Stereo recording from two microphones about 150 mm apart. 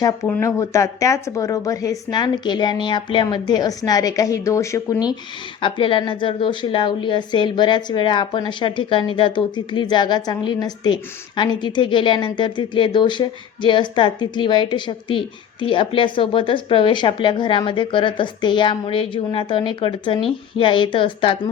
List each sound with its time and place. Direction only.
0.3 s speech: 15° left (ahead or behind)
5.6 s a woman's voice: 35° left (ahead or behind)